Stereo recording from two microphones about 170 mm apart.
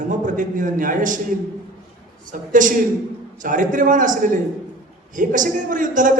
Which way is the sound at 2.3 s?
50° right (ahead or behind).